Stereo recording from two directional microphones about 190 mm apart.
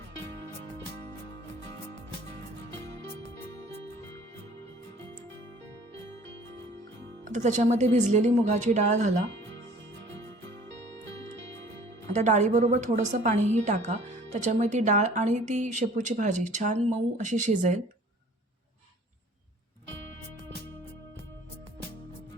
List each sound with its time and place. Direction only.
7.3 s a woman's voice: 40° right (ahead or behind)
12.1 s a woman's voice: 40° right (ahead or behind)